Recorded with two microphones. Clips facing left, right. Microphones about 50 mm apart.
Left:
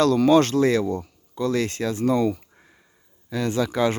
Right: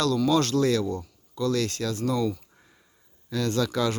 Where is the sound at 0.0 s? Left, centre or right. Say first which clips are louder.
Left 6 dB; left.